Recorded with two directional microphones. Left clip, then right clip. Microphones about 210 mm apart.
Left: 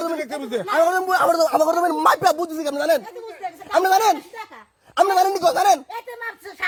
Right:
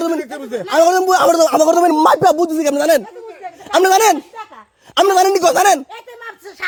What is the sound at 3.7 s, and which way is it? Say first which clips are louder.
Speech: right 5 dB; 55° right (ahead or behind).